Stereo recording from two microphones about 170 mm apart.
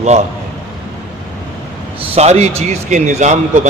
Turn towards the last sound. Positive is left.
turn(degrees=-40)  # may be behind; listen again after turning